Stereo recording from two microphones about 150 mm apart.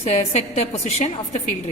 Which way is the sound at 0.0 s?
45° left (ahead or behind).